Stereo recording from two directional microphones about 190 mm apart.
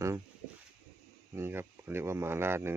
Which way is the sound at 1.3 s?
15° right (ahead or behind).